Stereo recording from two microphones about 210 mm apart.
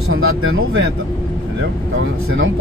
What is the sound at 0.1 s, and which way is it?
Speech, 80° right.